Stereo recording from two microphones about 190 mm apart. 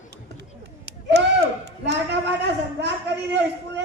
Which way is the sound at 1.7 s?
65° right (ahead or behind).